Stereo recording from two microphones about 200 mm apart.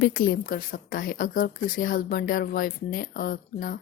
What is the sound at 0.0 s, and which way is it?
Speech, 50° left (ahead or behind).